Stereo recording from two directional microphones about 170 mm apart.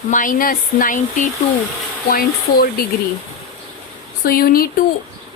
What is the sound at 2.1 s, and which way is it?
Speech, 60° left (ahead or behind).